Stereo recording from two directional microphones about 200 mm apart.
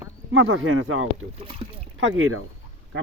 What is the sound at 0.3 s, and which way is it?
Speech, 90° right.